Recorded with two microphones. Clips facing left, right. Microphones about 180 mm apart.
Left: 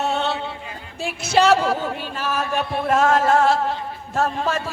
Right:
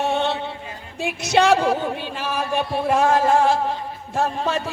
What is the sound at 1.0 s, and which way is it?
Speech, 20° right (ahead or behind).